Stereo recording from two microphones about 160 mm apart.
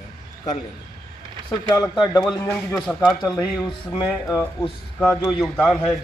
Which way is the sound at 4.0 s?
20° left (ahead or behind).